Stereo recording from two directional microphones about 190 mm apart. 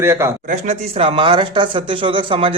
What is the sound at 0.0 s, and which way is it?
Speech, 15° right (ahead or behind).